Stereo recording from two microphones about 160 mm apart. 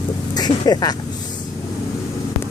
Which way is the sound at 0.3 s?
25° left (ahead or behind).